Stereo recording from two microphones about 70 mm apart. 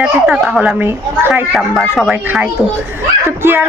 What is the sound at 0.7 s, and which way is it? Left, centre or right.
Speech, right.